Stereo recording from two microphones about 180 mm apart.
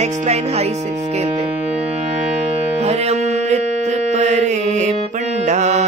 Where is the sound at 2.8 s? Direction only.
35° right (ahead or behind).